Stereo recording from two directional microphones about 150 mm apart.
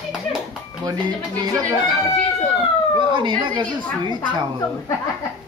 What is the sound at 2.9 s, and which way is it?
Speech, 30° right (ahead or behind).